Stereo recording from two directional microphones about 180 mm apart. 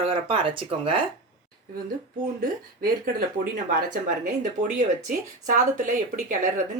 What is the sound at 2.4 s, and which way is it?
Speech, 55° right (ahead or behind).